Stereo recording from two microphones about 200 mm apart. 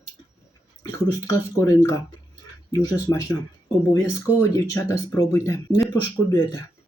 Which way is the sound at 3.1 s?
15° left (ahead or behind).